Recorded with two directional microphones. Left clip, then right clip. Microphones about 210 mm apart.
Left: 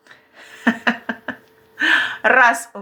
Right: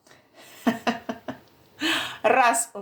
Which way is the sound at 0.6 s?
15° left (ahead or behind).